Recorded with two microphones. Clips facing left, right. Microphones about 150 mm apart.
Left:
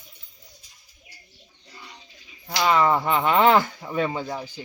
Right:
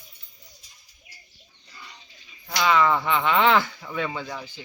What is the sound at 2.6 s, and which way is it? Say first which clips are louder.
Speech: left 1 dB; 35° left (ahead or behind).